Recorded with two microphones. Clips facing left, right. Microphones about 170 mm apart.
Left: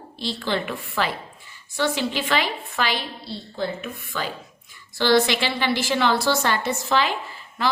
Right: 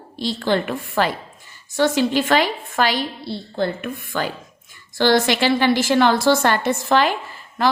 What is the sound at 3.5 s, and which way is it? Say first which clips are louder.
A woman's voice: right 5 dB; 60° right (ahead or behind).